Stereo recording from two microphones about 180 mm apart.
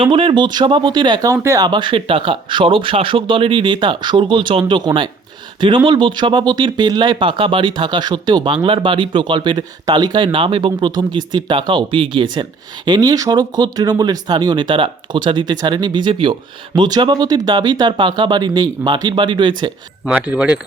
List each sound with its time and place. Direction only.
0.0 s speech: 30° right (ahead or behind)
20.1 s speech: 5° right (ahead or behind)